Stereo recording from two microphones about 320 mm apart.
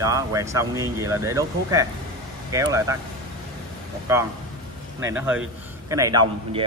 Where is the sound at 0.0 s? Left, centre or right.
Centre.